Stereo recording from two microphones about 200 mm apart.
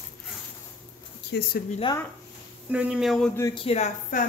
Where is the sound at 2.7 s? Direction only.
5° right (ahead or behind).